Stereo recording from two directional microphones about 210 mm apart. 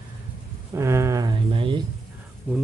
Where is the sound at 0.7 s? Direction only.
15° right (ahead or behind).